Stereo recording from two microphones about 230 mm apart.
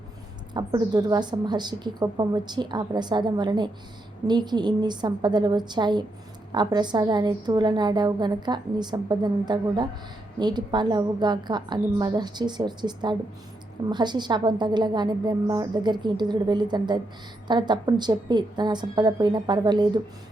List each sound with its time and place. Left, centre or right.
0.5 s a woman's voice: centre